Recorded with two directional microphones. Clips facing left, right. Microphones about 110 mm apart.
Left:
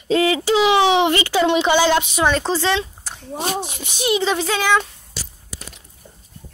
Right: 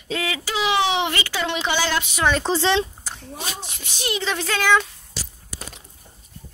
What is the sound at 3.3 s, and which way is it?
Speech, 45° left (ahead or behind).